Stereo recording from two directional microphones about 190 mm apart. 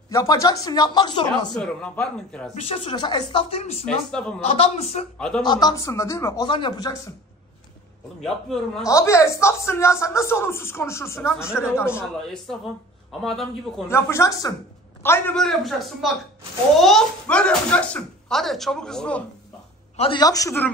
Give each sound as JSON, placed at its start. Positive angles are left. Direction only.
{"t": 0.1, "sound": "speech", "side_deg": 15}
{"t": 1.6, "sound": "speech", "side_deg": 5}
{"t": 2.5, "sound": "speech", "side_deg": 35}
{"t": 3.8, "sound": "speech", "side_deg": 5}
{"t": 4.5, "sound": "speech", "side_deg": 35}
{"t": 5.4, "sound": "speech", "side_deg": 20}
{"t": 8.2, "sound": "speech", "side_deg": 0}
{"t": 8.8, "sound": "speech", "side_deg": 15}
{"t": 12.2, "sound": "speech", "side_deg": 0}
{"t": 13.8, "sound": "speech", "side_deg": 15}
{"t": 20.0, "sound": "speech", "side_deg": 25}